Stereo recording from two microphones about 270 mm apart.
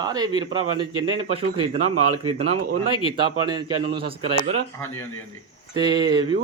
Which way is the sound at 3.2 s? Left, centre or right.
Centre.